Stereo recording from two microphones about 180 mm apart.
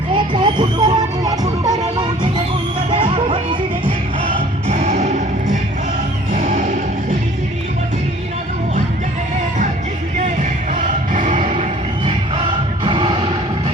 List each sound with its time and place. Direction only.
0.1 s music: 25° right (ahead or behind)
2.9 s music: 30° right (ahead or behind)
6.3 s music: 50° right (ahead or behind)
10.8 s music: 45° right (ahead or behind)
12.8 s music: 30° right (ahead or behind)